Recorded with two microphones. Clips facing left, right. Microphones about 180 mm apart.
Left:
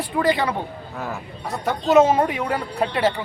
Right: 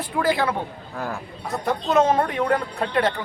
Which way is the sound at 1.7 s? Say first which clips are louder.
Left 4 dB; 5° left (ahead or behind).